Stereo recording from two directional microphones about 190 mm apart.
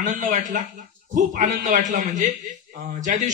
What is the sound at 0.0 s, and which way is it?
A man's voice, 45° right (ahead or behind).